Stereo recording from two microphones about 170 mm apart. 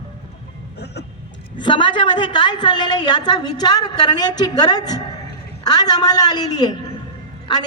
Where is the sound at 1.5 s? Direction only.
30° left (ahead or behind).